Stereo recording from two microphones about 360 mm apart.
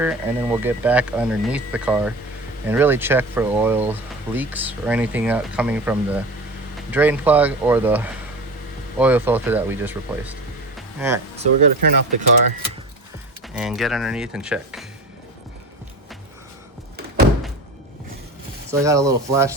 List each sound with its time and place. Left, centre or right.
0.0 s speech: centre
10.8 s a sound: centre
11.8 s speech: right
13.5 s speech: centre
18.7 s speech: centre